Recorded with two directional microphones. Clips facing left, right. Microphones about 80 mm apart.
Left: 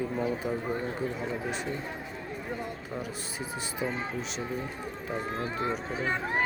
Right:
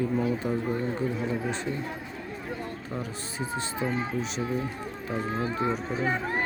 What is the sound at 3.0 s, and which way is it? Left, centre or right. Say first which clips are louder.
Speech: right 2 dB; centre.